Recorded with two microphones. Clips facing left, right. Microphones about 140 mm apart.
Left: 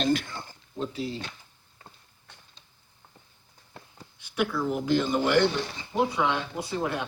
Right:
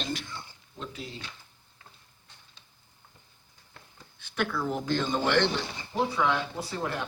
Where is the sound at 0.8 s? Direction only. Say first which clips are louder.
Left 8 dB; 30° left (ahead or behind).